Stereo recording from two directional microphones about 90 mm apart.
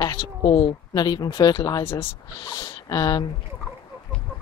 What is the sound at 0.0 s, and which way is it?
Speech, 45° left (ahead or behind).